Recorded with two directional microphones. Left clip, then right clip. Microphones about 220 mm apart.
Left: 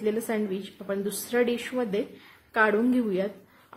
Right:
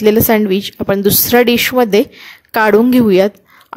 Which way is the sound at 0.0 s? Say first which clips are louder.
Right 17 dB; 45° right (ahead or behind).